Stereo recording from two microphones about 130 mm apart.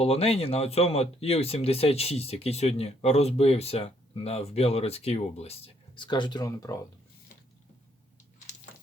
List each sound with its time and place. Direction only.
0.0 s speech: 50° left (ahead or behind)
6.0 s speech: 35° left (ahead or behind)